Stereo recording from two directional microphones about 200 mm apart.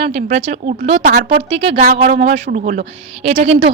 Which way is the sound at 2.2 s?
35° right (ahead or behind).